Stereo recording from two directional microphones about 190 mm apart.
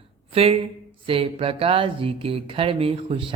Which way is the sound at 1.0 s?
30° right (ahead or behind).